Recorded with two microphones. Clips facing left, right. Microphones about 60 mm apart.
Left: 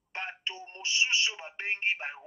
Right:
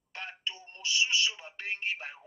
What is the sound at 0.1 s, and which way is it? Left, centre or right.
Speech, left.